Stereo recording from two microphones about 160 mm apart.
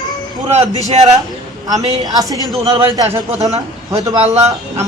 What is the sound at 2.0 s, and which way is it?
Speech, 25° right (ahead or behind).